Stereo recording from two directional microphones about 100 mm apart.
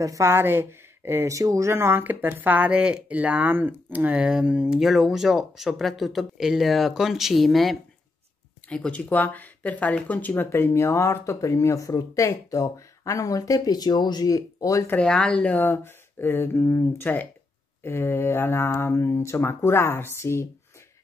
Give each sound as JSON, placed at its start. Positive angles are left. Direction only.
{"t": 0.0, "sound": "speech", "side_deg": -30}
{"t": 8.6, "sound": "speech", "side_deg": 10}
{"t": 15.0, "sound": "speech", "side_deg": 10}